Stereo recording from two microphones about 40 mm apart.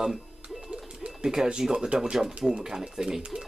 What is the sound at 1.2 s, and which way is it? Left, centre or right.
Speech, centre.